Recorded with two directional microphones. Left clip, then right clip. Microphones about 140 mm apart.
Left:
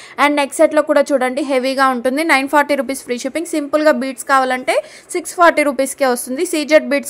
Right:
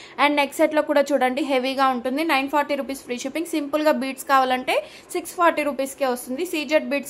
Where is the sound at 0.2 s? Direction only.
25° left (ahead or behind).